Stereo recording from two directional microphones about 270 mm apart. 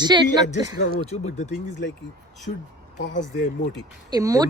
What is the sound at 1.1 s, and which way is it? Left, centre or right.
Speech, left.